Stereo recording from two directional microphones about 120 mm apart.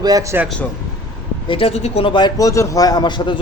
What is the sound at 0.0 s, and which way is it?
Speech, 30° right (ahead or behind).